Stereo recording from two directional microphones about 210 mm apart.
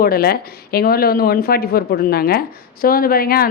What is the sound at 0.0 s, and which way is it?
Speech, 45° left (ahead or behind).